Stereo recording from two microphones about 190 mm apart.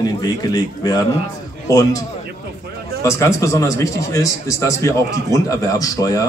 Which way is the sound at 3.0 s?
15° left (ahead or behind).